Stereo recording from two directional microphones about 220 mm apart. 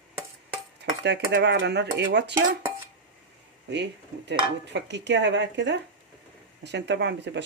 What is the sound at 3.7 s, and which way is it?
Speech, 50° right (ahead or behind).